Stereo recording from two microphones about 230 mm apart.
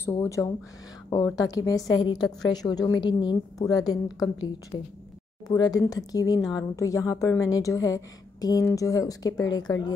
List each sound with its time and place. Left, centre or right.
0.0 s a woman's voice: centre